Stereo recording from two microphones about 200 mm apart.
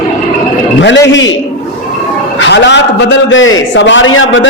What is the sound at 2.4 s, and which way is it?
A man's voice, 60° left (ahead or behind).